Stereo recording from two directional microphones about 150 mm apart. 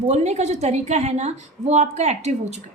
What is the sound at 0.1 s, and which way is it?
A woman's voice, 50° right (ahead or behind).